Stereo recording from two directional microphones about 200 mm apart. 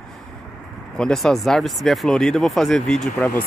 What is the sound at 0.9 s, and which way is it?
Speech, 5° left (ahead or behind).